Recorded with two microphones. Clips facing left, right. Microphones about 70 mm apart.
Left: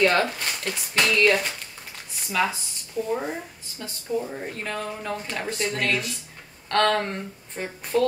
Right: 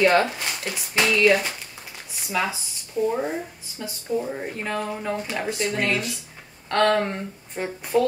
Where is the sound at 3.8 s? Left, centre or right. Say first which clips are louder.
Right 2 dB; centre.